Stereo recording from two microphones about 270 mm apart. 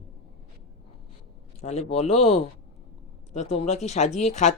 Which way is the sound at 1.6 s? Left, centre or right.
Left.